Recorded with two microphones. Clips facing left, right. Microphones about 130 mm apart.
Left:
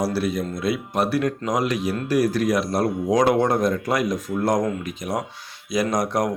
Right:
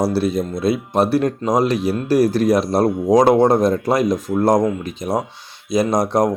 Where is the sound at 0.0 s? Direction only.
25° right (ahead or behind).